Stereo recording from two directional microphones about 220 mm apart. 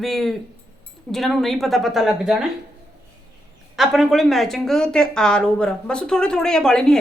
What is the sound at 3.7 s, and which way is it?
A man's voice, centre (ahead or behind).